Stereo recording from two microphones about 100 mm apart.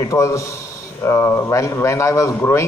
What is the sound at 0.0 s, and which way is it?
A man's voice, 35° left (ahead or behind).